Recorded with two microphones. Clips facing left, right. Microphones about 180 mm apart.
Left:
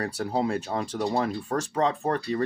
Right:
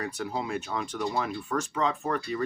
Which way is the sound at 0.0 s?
35° left (ahead or behind).